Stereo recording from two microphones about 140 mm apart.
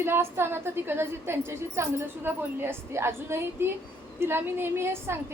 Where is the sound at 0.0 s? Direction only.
15° right (ahead or behind).